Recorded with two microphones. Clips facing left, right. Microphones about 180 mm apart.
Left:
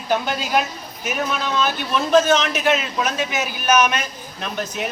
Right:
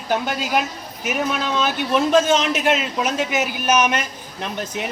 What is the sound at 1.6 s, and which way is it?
A man's voice, 20° right (ahead or behind).